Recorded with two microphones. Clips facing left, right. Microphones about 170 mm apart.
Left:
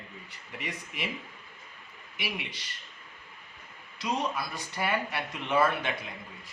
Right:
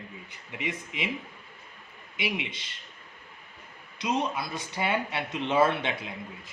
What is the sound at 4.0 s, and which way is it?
Speech, 20° right (ahead or behind).